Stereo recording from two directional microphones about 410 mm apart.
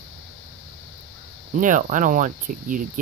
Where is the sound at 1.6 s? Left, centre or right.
Centre.